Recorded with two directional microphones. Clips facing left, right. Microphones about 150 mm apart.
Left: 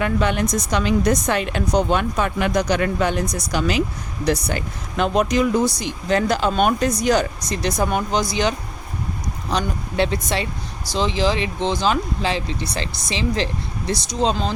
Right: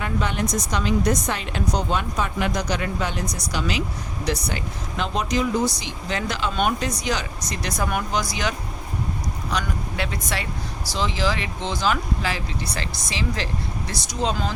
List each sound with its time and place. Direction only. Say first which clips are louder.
0.0 s a woman's voice: left 5 dB; 65° left (ahead or behind); by 7.3 s 45° left (ahead or behind)
7.5 s speech: left 5 dB; 30° left (ahead or behind)